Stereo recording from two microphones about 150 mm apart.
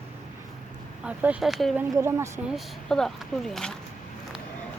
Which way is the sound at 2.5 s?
Centre (ahead or behind).